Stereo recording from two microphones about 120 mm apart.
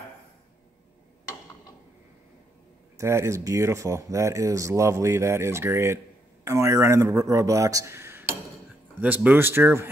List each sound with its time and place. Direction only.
3.0 s speech: 25° right (ahead or behind)